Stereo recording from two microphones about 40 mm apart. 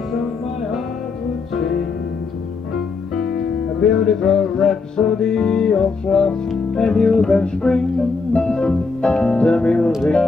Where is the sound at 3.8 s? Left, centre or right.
Centre.